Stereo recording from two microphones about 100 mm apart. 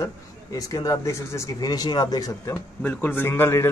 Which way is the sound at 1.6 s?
40° left (ahead or behind).